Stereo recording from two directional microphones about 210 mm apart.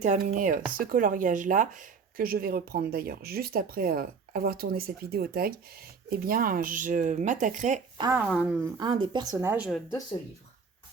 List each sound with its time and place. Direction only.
0.0 s speech: 35° right (ahead or behind)
8.1 s speech: 5° right (ahead or behind)
8.8 s speech: 20° right (ahead or behind); by 9.8 s 5° right (ahead or behind)